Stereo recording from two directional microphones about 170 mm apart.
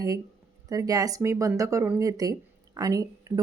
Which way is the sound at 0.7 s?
20° right (ahead or behind).